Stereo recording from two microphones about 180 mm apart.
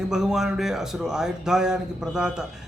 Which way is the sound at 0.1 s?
5° right (ahead or behind).